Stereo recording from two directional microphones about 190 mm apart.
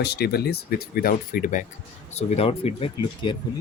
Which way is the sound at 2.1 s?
35° left (ahead or behind).